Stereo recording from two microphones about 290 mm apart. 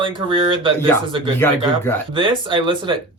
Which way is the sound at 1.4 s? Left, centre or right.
Centre.